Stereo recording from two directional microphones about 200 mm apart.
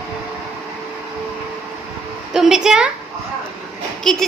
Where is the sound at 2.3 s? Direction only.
5° right (ahead or behind).